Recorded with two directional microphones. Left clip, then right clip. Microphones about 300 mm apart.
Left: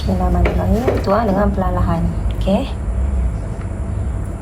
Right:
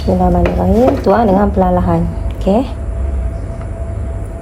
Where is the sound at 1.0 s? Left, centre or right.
Right.